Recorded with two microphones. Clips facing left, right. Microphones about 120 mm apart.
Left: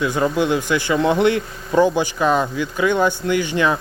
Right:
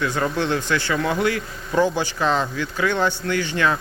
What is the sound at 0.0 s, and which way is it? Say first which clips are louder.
Speech: left 4 dB; 15° left (ahead or behind).